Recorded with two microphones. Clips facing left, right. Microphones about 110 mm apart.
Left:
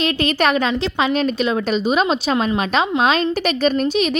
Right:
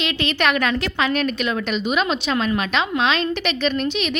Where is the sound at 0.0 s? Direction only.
40° left (ahead or behind).